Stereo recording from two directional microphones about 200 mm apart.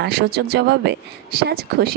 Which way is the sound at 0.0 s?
50° right (ahead or behind).